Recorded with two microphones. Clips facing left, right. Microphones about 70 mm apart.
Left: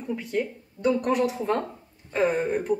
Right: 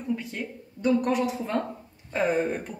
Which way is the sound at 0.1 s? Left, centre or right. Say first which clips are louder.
Left 4 dB; centre.